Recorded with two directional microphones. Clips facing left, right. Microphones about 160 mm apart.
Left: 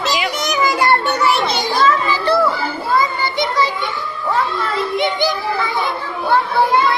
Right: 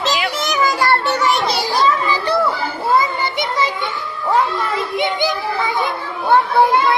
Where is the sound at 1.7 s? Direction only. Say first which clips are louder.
Left 2 dB; 15° right (ahead or behind).